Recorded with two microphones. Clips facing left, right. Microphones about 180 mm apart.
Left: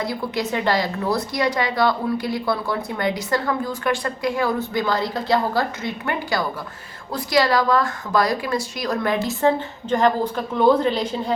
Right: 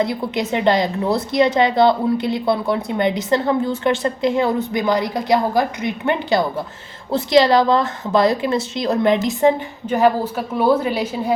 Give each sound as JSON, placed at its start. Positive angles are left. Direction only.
{"t": 0.0, "sound": "a woman's voice", "side_deg": -20}